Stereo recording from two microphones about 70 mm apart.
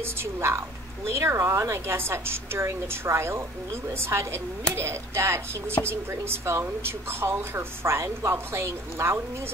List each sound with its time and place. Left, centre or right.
0.0 s a woman's voice: right